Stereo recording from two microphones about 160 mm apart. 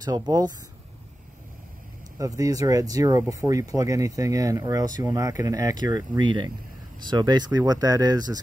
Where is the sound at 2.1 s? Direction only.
20° right (ahead or behind).